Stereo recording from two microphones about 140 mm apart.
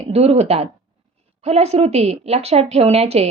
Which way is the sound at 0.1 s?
50° right (ahead or behind).